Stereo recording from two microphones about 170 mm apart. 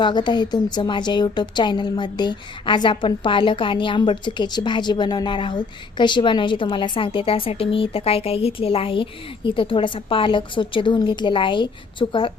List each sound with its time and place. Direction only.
0.0 s a woman's voice: 25° left (ahead or behind)